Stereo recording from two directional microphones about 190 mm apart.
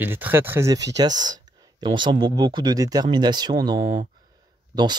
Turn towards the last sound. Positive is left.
turn(degrees=-20)  # may be behind; listen again after turning